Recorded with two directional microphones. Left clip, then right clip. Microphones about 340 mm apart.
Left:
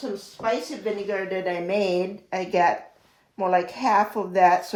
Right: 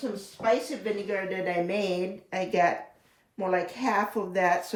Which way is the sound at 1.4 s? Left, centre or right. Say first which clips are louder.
Left 4 dB; centre.